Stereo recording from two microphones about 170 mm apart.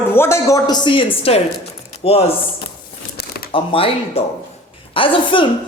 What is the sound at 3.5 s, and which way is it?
A woman's voice, 35° left (ahead or behind).